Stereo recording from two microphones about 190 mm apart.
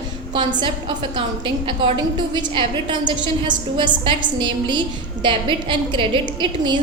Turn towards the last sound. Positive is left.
turn(degrees=-25)  # may be behind; listen again after turning